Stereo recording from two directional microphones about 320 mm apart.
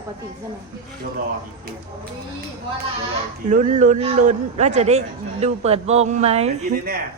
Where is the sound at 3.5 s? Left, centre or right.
Right.